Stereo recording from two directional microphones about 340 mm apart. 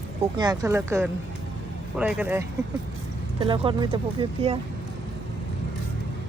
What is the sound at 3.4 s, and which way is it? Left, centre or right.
Speech, centre.